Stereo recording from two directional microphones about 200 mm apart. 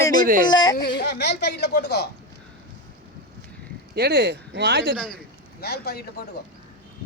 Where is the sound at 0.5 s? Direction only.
20° left (ahead or behind).